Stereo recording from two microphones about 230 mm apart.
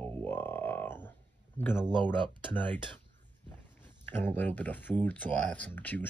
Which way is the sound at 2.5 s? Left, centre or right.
Centre.